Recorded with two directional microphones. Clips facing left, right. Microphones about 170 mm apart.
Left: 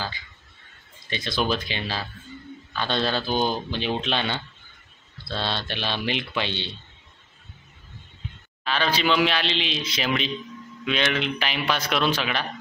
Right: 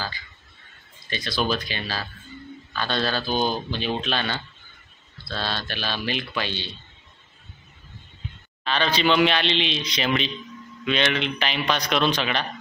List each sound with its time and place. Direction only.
1.1 s speech: 20° left (ahead or behind)
8.6 s speech: 10° left (ahead or behind)